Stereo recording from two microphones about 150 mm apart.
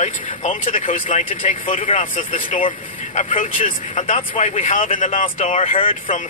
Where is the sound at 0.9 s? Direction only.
60° left (ahead or behind).